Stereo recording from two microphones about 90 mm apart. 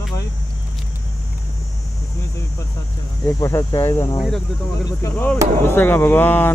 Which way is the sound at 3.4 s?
35° left (ahead or behind).